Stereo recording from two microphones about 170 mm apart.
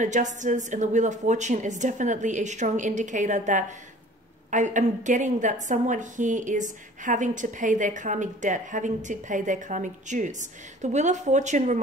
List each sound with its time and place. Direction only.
0.0 s a woman's voice: 45° right (ahead or behind)